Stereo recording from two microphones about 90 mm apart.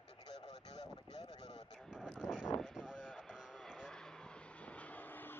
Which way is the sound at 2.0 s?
5° left (ahead or behind).